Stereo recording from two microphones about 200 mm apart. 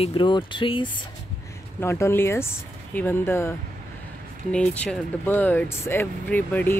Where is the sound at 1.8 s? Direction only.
10° left (ahead or behind).